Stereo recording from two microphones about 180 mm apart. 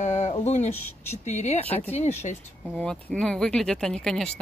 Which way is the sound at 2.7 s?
5° left (ahead or behind).